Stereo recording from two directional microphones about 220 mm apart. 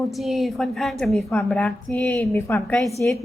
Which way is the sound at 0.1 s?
Centre (ahead or behind).